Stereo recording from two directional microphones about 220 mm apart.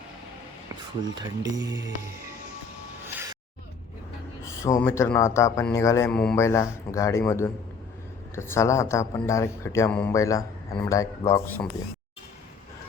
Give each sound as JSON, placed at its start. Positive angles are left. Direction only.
{"t": 1.1, "sound": "speech", "side_deg": -15}
{"t": 4.4, "sound": "speech", "side_deg": 15}